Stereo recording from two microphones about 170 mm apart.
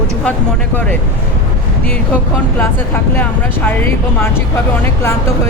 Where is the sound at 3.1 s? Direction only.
10° left (ahead or behind).